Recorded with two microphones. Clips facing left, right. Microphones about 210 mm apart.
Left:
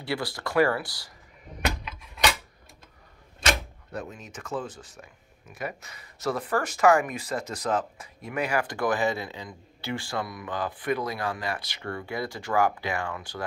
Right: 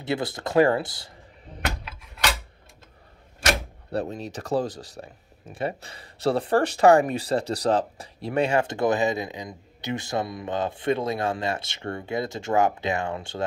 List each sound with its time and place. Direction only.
0.0 s speech: 20° right (ahead or behind)
3.9 s speech: 35° right (ahead or behind)